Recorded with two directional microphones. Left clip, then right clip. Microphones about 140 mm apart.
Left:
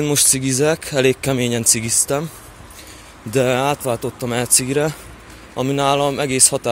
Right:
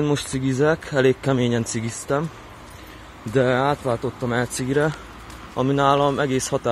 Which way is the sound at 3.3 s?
20° left (ahead or behind).